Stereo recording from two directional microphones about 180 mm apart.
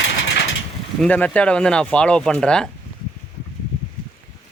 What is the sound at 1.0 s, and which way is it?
A man's voice, 10° left (ahead or behind).